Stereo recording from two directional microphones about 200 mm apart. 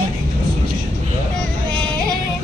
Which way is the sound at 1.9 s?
20° right (ahead or behind).